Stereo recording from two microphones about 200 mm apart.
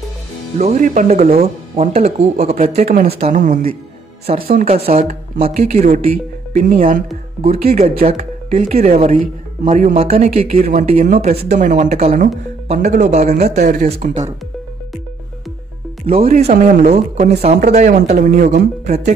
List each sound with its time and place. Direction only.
0.6 s a woman's voice: 35° right (ahead or behind)
2.8 s a woman's voice: 45° right (ahead or behind)
3.1 s a woman's voice: 35° right (ahead or behind)
7.8 s a woman's voice: 30° right (ahead or behind)
11.1 s a woman's voice: 45° right (ahead or behind)
11.4 s a woman's voice: 35° right (ahead or behind)
16.3 s a woman's voice: 35° right (ahead or behind)